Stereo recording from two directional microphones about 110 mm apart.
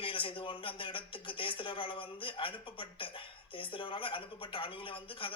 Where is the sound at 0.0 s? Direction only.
50° left (ahead or behind).